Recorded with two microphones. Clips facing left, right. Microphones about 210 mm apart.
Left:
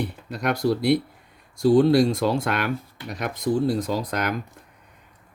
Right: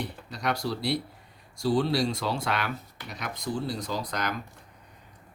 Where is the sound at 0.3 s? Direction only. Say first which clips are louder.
Left 8 dB; 55° left (ahead or behind).